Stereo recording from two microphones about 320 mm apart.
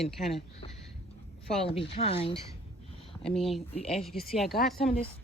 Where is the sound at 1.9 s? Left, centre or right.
Centre.